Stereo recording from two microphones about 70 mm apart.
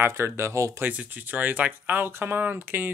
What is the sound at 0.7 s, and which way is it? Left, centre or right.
Speech, right.